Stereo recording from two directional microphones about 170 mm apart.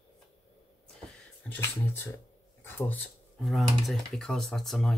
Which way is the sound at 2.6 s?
10° left (ahead or behind).